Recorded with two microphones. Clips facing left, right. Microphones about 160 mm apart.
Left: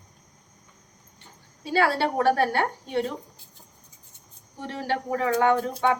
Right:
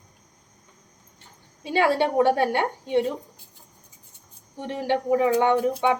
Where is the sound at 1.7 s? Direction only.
20° right (ahead or behind).